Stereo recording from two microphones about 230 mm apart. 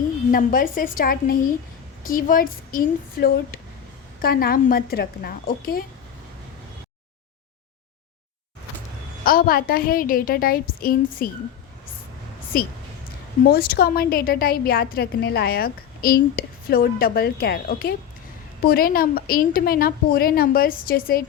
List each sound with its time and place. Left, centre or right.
0.3 s a woman's voice: left
9.2 s a woman's voice: left
12.5 s a woman's voice: left